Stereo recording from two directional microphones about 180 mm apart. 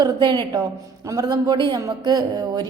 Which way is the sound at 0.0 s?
25° right (ahead or behind).